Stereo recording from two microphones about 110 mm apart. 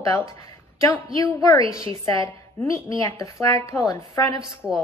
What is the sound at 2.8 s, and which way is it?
Speech, 50° right (ahead or behind).